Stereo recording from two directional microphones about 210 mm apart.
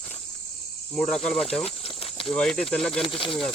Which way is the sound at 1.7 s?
25° left (ahead or behind).